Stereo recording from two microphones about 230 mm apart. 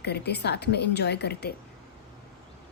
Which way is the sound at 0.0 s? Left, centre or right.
Left.